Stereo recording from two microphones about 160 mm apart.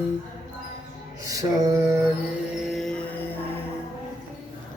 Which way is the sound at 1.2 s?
20° right (ahead or behind).